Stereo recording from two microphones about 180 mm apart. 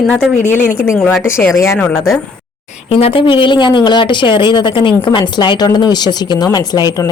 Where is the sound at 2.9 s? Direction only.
30° left (ahead or behind).